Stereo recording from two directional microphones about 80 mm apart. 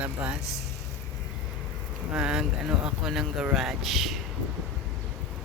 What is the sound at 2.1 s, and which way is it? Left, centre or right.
Speech, centre.